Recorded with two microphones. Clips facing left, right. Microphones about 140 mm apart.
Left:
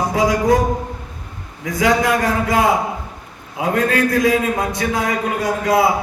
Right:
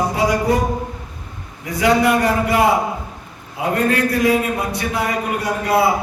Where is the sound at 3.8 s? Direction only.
90° left.